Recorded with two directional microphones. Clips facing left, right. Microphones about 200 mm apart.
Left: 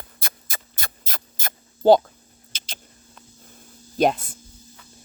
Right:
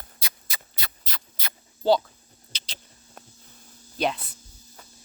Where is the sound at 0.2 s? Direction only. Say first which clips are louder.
Left 5 dB; 50° left (ahead or behind).